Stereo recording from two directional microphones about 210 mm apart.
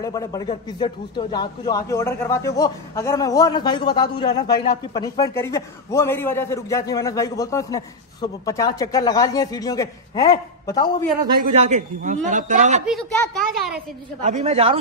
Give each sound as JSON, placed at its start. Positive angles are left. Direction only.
{"t": 0.0, "sound": "a man's voice", "side_deg": 15}
{"t": 11.3, "sound": "a man's voice", "side_deg": -40}
{"t": 12.8, "sound": "speech", "side_deg": 0}
{"t": 14.2, "sound": "a man's voice", "side_deg": -30}